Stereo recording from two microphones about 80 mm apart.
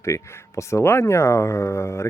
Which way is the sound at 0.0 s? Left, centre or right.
Left.